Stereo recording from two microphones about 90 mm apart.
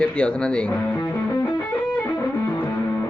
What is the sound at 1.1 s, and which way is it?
Music, 30° left (ahead or behind).